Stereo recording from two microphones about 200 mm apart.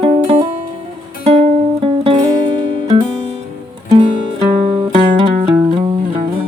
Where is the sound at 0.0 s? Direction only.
30° right (ahead or behind).